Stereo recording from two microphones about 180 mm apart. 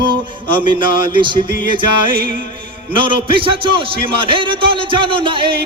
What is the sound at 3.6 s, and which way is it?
A man's voice, 30° right (ahead or behind).